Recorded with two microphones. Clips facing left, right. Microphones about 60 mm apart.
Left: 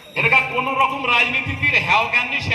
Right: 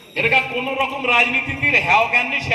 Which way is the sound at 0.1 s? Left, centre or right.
Left.